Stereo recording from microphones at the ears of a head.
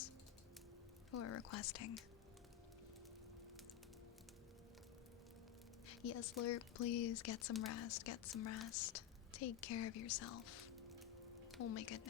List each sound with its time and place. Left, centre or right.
1.1 s speech: left
5.9 s speech: left